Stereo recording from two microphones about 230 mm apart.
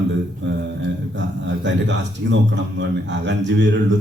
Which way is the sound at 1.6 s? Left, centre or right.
Right.